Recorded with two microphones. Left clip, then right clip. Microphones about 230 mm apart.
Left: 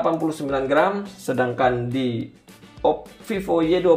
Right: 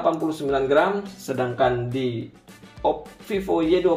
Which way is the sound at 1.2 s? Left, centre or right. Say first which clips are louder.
Left 2 dB; left.